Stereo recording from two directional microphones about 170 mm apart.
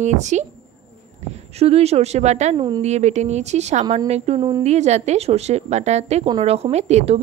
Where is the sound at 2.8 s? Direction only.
40° right (ahead or behind).